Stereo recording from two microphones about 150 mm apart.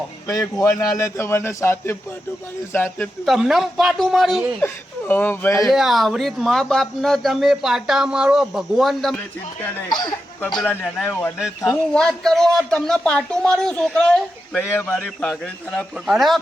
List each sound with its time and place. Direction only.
0.3 s a man's voice: 20° left (ahead or behind)
3.2 s speech: centre (ahead or behind)
4.6 s a man's voice: 10° left (ahead or behind)
5.6 s speech: centre (ahead or behind)
10.7 s a man's voice: 10° left (ahead or behind)
11.9 s a man's voice: 5° left (ahead or behind)